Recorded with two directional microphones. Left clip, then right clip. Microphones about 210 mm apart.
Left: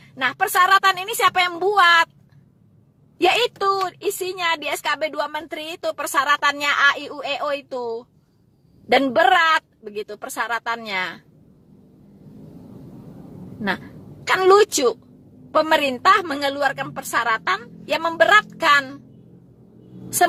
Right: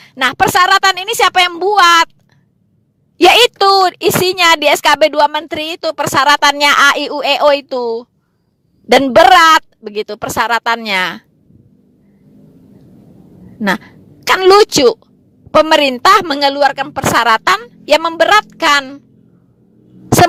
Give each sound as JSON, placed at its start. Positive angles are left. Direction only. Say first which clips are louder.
{"t": 0.0, "sound": "a woman's voice", "louder": "right 9 dB", "side_deg": -45}
{"t": 3.2, "sound": "a woman's voice", "louder": "right 11 dB", "side_deg": -45}
{"t": 13.6, "sound": "a woman's voice", "louder": "right 9 dB", "side_deg": -45}